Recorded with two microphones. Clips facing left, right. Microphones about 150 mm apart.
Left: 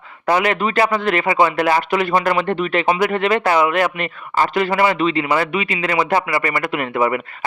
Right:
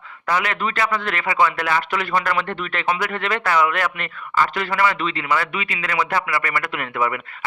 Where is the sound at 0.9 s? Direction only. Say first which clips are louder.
Left 5 dB; 20° left (ahead or behind).